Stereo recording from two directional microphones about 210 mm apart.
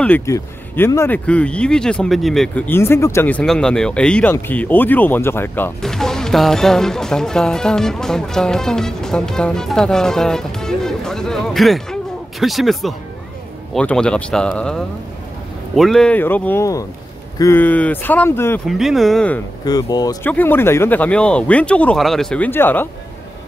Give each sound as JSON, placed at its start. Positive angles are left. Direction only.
{"t": 0.0, "sound": "speech", "side_deg": 10}
{"t": 18.7, "sound": "speech", "side_deg": 0}
{"t": 19.6, "sound": "speech", "side_deg": 20}